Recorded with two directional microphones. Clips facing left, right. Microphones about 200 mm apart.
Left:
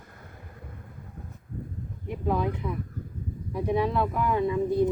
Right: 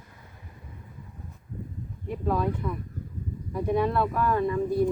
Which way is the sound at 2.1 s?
15° left (ahead or behind).